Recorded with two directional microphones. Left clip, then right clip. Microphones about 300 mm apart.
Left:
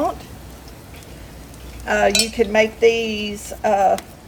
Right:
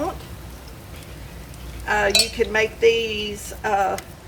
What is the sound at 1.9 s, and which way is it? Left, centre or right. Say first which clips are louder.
A woman's voice: left 2 dB; centre.